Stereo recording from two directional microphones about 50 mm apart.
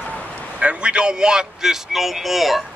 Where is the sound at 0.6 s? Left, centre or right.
Right; by 2.6 s centre.